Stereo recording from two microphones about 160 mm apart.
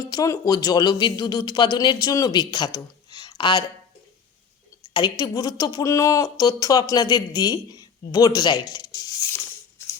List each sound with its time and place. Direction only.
0.0 s speech: 20° left (ahead or behind)
4.9 s a woman's voice: 25° left (ahead or behind)